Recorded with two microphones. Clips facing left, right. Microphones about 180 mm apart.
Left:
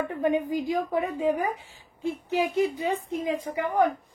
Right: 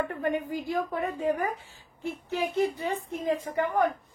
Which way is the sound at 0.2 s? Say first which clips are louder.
Left 4 dB; 15° left (ahead or behind).